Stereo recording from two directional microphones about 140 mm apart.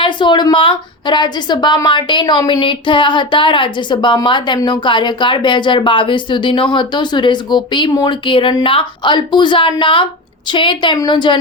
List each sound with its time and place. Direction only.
0.0 s a woman's voice: 35° left (ahead or behind)